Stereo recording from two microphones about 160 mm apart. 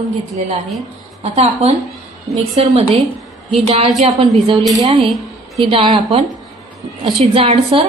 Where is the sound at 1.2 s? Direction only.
45° right (ahead or behind).